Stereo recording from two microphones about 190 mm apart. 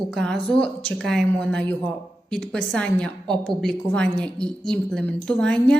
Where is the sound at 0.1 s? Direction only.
5° left (ahead or behind).